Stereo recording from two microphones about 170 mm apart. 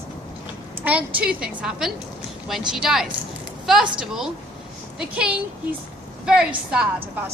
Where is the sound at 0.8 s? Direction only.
10° right (ahead or behind).